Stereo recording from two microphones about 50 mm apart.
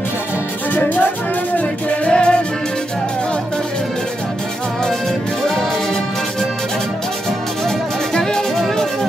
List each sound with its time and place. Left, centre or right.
0.7 s speech: left
1.6 s music: left
7.6 s music: centre